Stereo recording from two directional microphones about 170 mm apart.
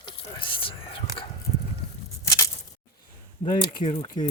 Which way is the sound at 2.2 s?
15° left (ahead or behind).